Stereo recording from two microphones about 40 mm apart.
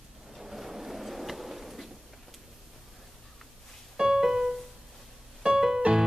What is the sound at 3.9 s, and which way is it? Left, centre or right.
Music, centre.